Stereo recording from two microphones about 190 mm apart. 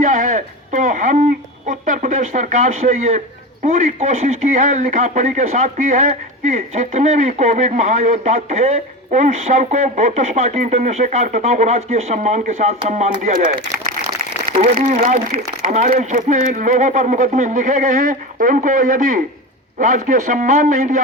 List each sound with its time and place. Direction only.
0.0 s speech: 40° right (ahead or behind)
14.8 s a man's voice: 45° right (ahead or behind)